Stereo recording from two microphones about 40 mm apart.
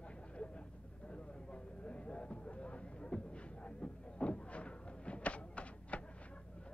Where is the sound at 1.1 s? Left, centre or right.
Left.